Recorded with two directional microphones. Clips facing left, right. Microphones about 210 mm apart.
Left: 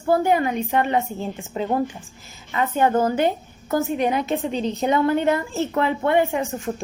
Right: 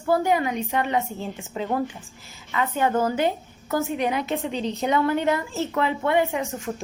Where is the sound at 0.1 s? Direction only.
50° left (ahead or behind).